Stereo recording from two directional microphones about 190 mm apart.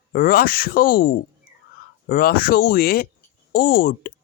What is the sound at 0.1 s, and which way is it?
Speech, 50° left (ahead or behind).